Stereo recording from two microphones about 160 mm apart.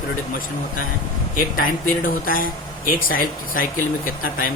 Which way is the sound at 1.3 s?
60° left (ahead or behind).